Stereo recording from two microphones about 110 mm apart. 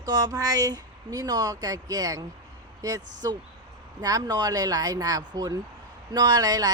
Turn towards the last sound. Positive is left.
turn(degrees=-35)  # may be behind; listen again after turning